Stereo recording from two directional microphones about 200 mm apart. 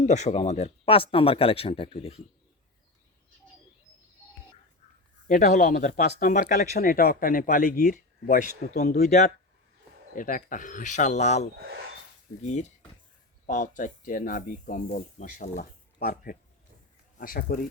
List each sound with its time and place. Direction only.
0.0 s speech: 35° left (ahead or behind)
5.3 s speech: 40° left (ahead or behind)